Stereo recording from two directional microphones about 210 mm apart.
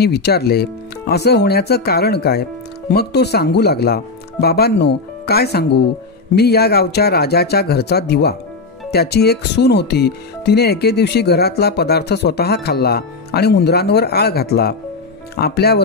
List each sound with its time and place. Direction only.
0.0 s speech: 50° left (ahead or behind)